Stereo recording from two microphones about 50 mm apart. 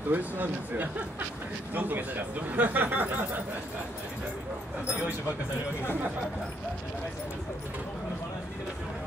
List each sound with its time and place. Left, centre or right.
0.1 s speech: right